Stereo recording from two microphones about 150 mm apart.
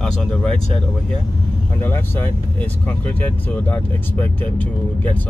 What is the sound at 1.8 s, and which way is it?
Speech, 15° left (ahead or behind).